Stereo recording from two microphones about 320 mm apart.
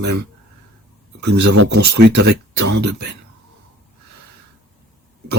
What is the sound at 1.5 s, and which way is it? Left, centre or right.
Speech, right.